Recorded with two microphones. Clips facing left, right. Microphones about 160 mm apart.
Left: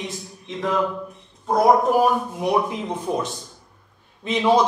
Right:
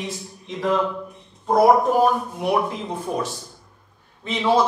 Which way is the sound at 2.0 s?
15° left (ahead or behind).